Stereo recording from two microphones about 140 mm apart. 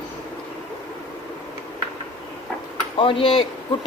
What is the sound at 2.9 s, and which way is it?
Speech, 40° left (ahead or behind).